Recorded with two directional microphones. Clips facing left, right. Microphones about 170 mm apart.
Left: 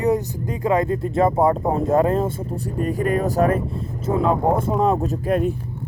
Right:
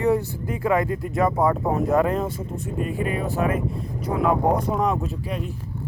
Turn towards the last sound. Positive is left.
turn(degrees=50)  # may be behind; listen again after turning